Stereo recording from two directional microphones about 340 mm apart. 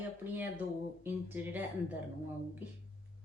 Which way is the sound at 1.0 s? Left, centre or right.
Centre.